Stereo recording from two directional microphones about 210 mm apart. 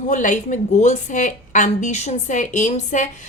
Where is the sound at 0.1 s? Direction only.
35° left (ahead or behind).